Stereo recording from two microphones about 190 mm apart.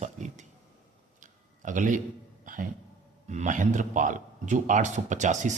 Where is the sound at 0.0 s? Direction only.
40° right (ahead or behind).